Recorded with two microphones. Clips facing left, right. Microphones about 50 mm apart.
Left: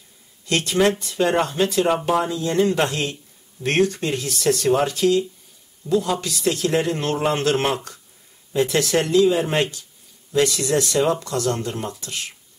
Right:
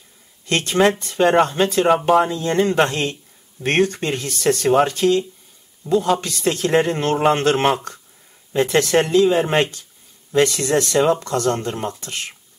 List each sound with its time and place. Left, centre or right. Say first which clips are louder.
0.5 s speech: right 2 dB; right